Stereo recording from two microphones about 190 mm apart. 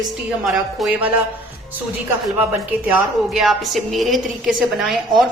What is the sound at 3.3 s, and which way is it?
A woman's voice, centre (ahead or behind).